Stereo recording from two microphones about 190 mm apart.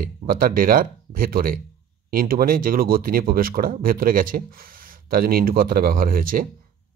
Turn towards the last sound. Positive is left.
turn(degrees=-50)  # may be behind; listen again after turning